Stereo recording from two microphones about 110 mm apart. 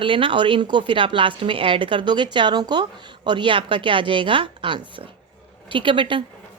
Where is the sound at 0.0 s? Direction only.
50° right (ahead or behind).